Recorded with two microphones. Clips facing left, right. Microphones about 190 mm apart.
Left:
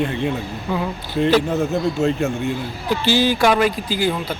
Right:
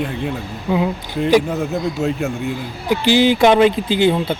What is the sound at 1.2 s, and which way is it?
A man's voice, 5° right (ahead or behind).